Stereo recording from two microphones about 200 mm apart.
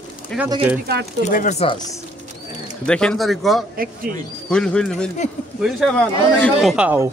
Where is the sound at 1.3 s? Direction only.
40° left (ahead or behind).